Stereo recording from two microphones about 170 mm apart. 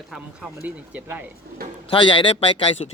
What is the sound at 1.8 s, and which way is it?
Speech, 30° left (ahead or behind).